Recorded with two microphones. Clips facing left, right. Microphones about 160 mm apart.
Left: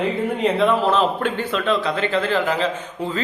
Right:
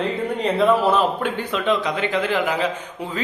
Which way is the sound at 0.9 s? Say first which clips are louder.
Even; 10° right (ahead or behind).